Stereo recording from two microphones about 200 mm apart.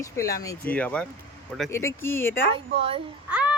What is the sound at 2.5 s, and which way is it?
Speech, 30° right (ahead or behind).